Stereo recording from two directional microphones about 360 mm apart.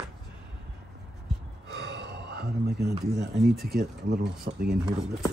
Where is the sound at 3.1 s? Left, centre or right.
Centre.